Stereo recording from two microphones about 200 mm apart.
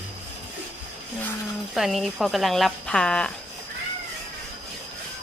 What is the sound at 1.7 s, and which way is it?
Speech, centre (ahead or behind).